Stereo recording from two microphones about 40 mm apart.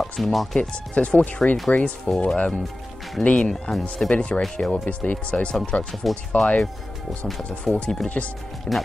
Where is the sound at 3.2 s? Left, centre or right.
Left.